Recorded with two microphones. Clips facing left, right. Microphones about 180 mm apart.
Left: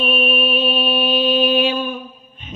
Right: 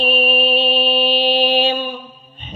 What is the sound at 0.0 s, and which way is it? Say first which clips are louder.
Mantra: right 2 dB; 35° right (ahead or behind).